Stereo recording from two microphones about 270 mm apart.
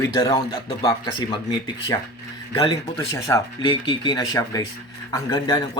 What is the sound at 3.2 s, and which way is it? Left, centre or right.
Speech, centre.